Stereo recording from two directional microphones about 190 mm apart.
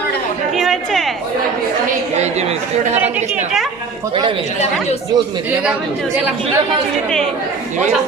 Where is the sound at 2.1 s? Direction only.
35° right (ahead or behind).